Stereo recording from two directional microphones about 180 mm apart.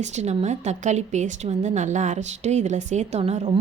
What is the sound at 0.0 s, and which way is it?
A woman's voice, 40° right (ahead or behind).